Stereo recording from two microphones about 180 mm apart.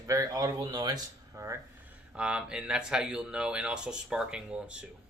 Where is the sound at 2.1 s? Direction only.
5° right (ahead or behind).